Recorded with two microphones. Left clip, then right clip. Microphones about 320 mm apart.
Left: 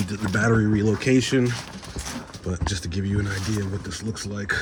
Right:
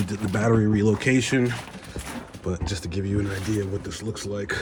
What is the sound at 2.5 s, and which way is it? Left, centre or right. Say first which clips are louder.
Speech: left 1 dB; right.